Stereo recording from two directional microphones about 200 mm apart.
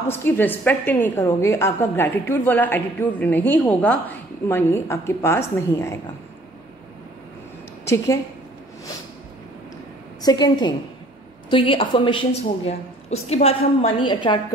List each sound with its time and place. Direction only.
0.1 s a woman's voice: 10° left (ahead or behind)
7.8 s a woman's voice: 15° left (ahead or behind)
10.2 s a woman's voice: 20° left (ahead or behind)